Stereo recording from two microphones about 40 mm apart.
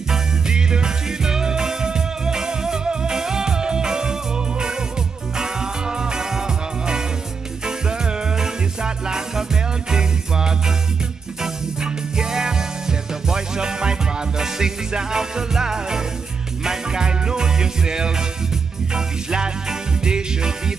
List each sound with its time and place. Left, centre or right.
0.1 s music: centre